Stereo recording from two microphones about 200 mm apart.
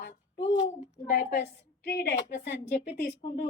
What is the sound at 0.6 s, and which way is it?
A woman's voice, 50° left (ahead or behind).